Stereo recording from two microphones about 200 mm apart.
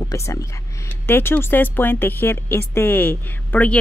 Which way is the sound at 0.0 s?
15° left (ahead or behind).